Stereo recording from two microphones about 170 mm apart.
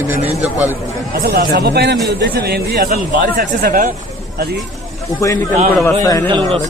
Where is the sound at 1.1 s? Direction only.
70° right (ahead or behind).